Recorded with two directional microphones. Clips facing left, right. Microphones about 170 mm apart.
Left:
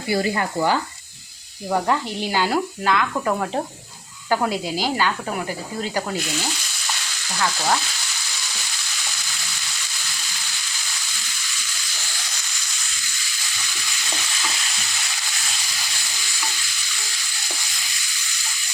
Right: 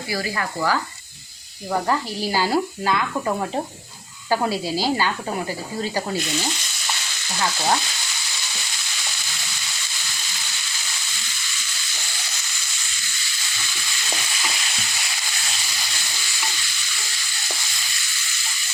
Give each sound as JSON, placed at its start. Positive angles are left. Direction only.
{"t": 0.1, "sound": "speech", "side_deg": 25}
{"t": 2.3, "sound": "speech", "side_deg": -10}
{"t": 4.4, "sound": "speech", "side_deg": 15}
{"t": 7.3, "sound": "speech", "side_deg": -10}